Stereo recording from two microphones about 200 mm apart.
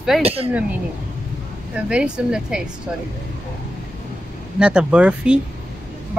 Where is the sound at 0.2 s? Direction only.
30° right (ahead or behind).